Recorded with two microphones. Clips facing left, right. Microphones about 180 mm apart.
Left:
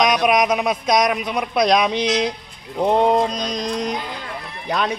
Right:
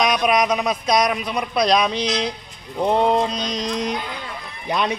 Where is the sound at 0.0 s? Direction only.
Centre (ahead or behind).